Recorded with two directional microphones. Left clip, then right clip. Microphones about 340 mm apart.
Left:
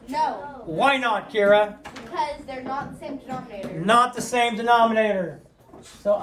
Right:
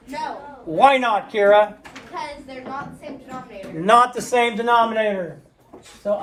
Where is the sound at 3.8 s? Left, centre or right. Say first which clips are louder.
Right 4 dB; centre.